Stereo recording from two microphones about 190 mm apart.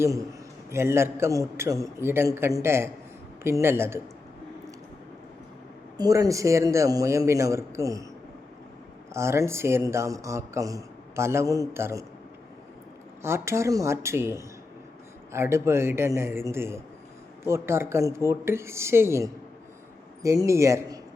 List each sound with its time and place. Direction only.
0.0 s speech: 15° right (ahead or behind)
6.0 s speech: 15° right (ahead or behind)
9.1 s speech: 15° right (ahead or behind)
13.2 s speech: 15° right (ahead or behind)